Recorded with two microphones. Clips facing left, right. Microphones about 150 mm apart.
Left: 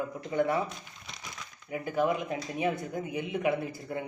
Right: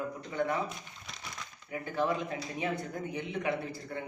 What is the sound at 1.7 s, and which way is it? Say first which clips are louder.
Speech: left 3 dB; 15° left (ahead or behind).